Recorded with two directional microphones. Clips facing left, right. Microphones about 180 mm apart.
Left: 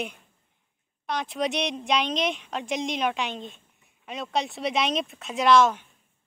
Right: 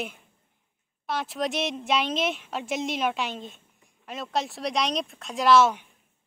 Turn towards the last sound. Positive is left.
turn(degrees=-10)  # may be behind; listen again after turning